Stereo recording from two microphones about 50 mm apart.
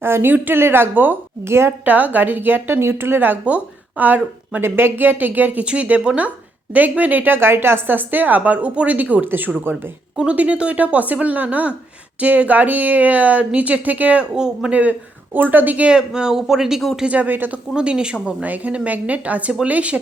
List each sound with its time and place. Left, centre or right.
0.0 s speech: right
1.5 s a woman's voice: right
1.8 s speech: right
3.4 s speech: right
4.6 s speech: right
5.6 s speech: right
7.3 s speech: right
10.2 s speech: right
14.3 s speech: centre
14.7 s speech: right
15.9 s speech: centre
17.1 s speech: right
17.7 s speech: centre
18.4 s speech: right